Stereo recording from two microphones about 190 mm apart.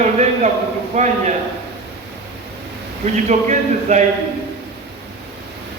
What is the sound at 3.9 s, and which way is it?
Speech, 35° right (ahead or behind).